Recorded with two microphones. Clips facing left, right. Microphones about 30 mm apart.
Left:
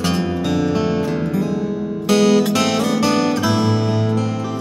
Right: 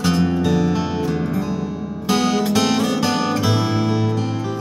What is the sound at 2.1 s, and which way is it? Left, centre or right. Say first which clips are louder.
Music: left 4 dB; centre.